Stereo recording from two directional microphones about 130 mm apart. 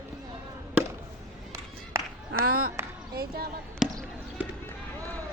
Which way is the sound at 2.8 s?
20° right (ahead or behind).